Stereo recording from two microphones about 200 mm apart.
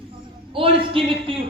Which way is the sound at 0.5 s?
25° right (ahead or behind).